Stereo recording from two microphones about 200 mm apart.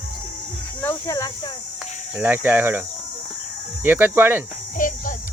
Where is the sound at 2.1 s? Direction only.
10° right (ahead or behind).